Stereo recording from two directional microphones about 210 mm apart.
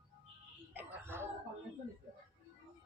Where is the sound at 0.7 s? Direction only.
10° right (ahead or behind).